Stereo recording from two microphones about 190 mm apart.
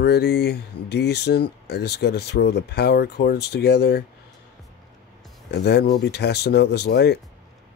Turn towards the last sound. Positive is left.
turn(degrees=60)  # may be behind; listen again after turning